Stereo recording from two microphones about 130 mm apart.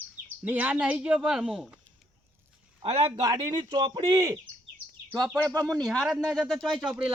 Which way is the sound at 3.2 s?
30° right (ahead or behind).